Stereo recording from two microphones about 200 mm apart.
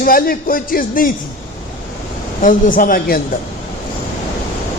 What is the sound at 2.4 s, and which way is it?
Speech, 40° left (ahead or behind).